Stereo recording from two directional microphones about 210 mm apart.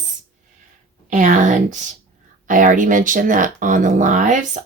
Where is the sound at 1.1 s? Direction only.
35° right (ahead or behind).